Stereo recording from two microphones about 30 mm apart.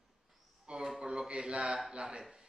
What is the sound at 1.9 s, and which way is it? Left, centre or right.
Speech, right.